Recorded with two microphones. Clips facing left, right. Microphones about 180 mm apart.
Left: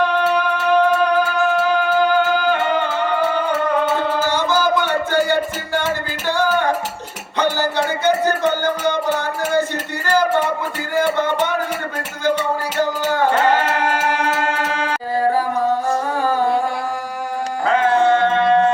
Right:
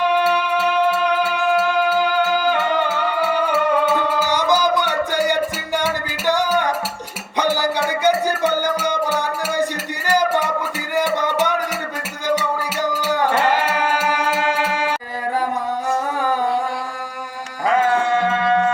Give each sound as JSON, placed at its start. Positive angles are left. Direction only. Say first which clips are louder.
{"t": 0.5, "sound": "music", "louder": "left 2 dB", "side_deg": -10}
{"t": 4.2, "sound": "music", "louder": "even", "side_deg": -15}